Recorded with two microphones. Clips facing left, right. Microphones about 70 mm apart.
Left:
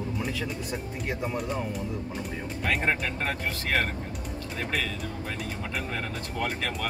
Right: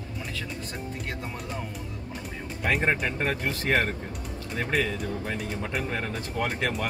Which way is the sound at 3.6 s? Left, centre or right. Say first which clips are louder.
Right 3 dB; right.